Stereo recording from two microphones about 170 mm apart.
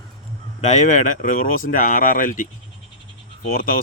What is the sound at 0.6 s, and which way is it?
Speech, 45° left (ahead or behind).